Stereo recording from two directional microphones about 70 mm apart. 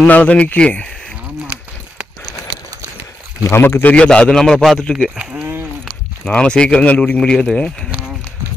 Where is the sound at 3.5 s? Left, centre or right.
Left.